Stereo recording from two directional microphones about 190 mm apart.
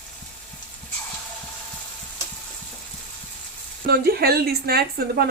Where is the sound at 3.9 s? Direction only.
55° right (ahead or behind).